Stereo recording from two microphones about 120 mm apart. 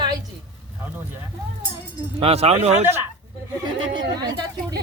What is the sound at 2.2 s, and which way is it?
Speech, 60° right (ahead or behind).